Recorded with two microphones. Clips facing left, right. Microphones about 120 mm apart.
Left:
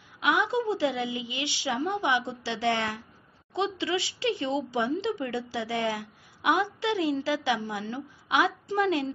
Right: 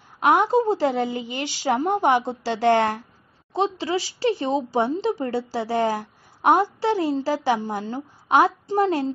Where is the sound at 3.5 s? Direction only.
40° right (ahead or behind).